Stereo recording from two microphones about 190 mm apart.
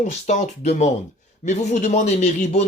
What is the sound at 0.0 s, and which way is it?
Speech, 40° left (ahead or behind).